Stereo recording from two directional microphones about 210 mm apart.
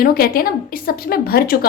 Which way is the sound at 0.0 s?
45° left (ahead or behind).